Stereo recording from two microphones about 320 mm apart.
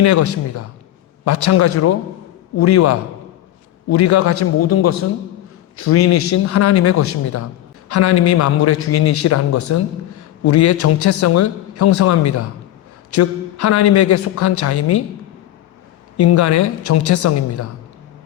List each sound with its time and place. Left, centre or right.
0.0 s a man's voice: left
14.3 s a man's voice: left
16.1 s a man's voice: left